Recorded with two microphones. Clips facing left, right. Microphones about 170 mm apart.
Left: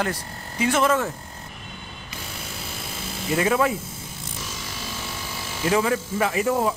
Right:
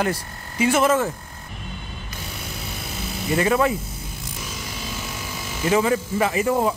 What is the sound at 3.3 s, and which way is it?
Speech, centre (ahead or behind).